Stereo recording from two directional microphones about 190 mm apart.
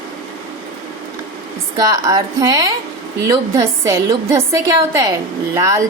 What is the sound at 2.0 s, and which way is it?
A woman's voice, 20° right (ahead or behind).